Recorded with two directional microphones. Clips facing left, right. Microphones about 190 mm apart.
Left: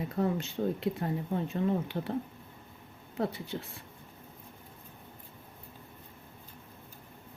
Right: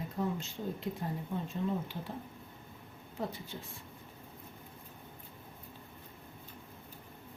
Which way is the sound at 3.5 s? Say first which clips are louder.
Left 7 dB; 70° left (ahead or behind).